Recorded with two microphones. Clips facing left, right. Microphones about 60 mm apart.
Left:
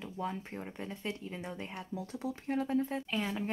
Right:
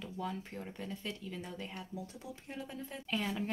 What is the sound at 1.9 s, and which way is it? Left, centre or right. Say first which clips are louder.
Speech: left 7 dB; left.